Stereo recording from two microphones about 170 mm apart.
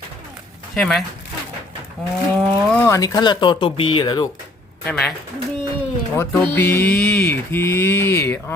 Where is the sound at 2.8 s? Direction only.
20° left (ahead or behind).